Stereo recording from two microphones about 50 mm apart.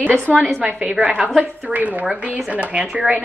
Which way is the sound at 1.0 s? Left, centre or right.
Centre.